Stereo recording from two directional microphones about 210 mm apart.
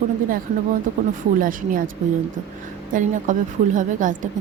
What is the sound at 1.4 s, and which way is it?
Speech, 40° right (ahead or behind).